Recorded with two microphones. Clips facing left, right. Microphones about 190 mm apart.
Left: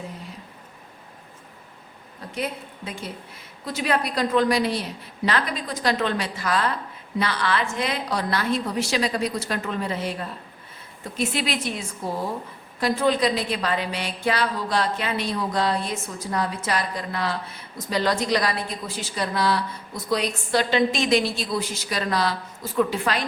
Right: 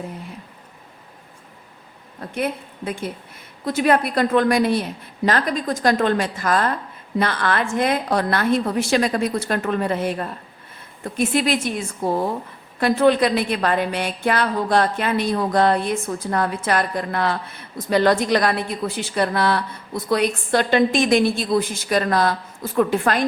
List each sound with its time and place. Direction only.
2.3 s a woman's voice: 55° right (ahead or behind)
12.8 s a woman's voice: 60° right (ahead or behind)